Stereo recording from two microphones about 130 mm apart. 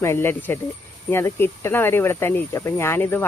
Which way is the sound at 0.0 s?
20° left (ahead or behind).